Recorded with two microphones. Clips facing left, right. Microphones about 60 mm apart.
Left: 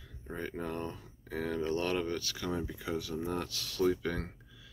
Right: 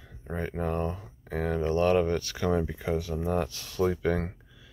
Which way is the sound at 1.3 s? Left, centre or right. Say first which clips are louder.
Right 5 dB; centre.